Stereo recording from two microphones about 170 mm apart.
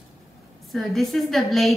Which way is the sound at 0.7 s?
Centre (ahead or behind).